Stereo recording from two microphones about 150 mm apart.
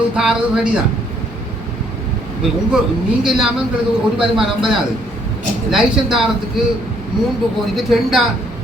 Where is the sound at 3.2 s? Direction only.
5° right (ahead or behind).